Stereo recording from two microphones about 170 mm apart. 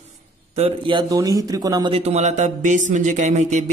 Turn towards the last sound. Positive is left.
turn(degrees=-45)  # may be behind; listen again after turning